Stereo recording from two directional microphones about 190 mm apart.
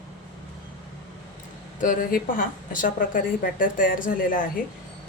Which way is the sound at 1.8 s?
45° left (ahead or behind).